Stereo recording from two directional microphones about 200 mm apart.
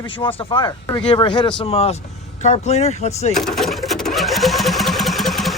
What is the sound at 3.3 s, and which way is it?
Engine, centre (ahead or behind).